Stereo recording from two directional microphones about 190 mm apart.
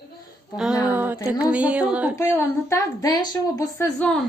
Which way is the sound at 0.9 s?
10° right (ahead or behind).